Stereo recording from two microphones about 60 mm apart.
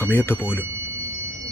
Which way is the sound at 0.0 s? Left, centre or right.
Left.